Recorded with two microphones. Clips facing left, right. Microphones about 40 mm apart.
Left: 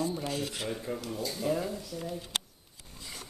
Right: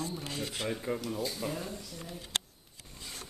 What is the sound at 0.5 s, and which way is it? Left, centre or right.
Speech, centre.